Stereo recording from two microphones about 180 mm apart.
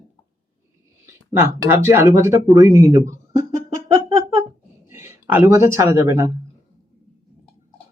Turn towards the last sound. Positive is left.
turn(degrees=-15)  # may be behind; listen again after turning